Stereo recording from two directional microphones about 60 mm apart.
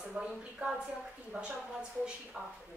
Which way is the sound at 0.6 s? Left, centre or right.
Centre.